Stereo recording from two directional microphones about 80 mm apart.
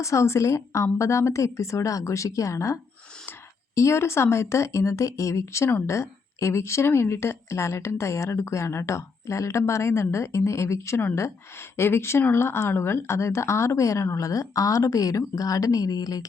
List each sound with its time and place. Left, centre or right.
0.0 s speech: left
3.8 s speech: left